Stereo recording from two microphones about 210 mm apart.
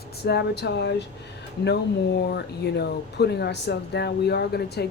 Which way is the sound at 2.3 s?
50° left (ahead or behind).